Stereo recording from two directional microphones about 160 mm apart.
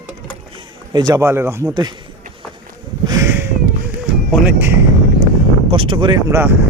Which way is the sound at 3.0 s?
20° right (ahead or behind).